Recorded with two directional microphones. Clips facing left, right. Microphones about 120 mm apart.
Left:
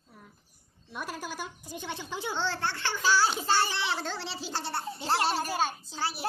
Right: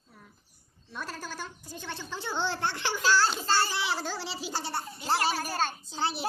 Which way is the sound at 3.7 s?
5° right (ahead or behind).